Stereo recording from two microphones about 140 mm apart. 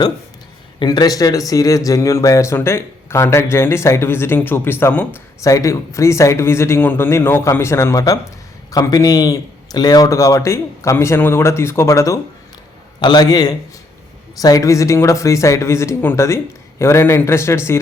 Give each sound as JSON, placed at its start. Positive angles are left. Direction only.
{"t": 0.8, "sound": "speech", "side_deg": 30}